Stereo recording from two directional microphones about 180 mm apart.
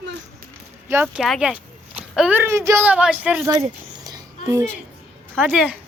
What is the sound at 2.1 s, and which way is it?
A woman's voice, 5° right (ahead or behind).